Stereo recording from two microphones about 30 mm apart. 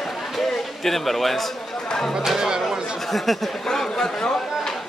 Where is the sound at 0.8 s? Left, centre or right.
Centre.